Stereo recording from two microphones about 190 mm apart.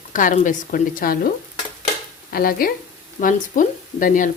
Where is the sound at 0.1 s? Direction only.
45° left (ahead or behind).